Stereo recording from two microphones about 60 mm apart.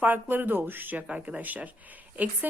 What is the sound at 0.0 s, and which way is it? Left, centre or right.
Speech, right.